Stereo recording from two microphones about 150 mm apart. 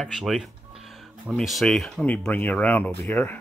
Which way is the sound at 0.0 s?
Centre (ahead or behind).